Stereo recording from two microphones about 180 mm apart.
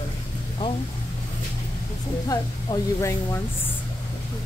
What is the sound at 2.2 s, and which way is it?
Speech, 20° left (ahead or behind).